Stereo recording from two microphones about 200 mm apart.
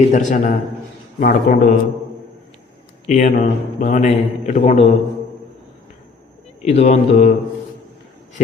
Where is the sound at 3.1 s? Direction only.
40° left (ahead or behind).